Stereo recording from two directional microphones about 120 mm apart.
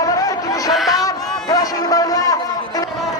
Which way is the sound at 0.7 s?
Centre (ahead or behind).